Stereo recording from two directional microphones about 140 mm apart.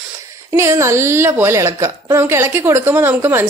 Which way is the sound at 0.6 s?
20° right (ahead or behind).